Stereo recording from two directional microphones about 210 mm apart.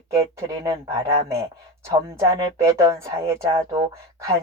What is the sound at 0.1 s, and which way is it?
Speech, 15° right (ahead or behind).